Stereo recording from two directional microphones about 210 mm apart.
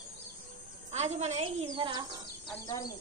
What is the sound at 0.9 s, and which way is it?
Speech, 30° right (ahead or behind).